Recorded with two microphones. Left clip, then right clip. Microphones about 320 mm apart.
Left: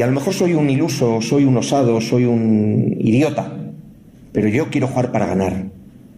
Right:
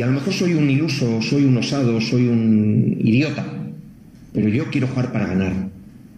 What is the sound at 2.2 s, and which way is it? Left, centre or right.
Mantra, left.